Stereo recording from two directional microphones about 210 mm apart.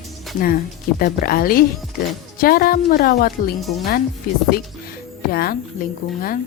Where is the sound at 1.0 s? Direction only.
45° left (ahead or behind).